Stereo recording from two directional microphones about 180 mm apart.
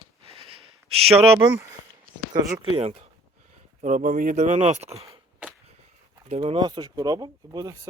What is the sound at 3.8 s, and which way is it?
Speech, 45° right (ahead or behind).